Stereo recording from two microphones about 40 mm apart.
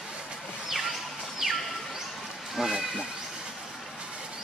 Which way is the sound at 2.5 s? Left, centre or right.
Centre.